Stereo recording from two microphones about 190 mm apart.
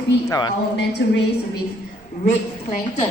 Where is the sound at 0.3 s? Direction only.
20° left (ahead or behind).